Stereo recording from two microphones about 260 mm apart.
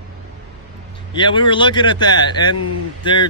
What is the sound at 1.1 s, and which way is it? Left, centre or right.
A man's voice, centre.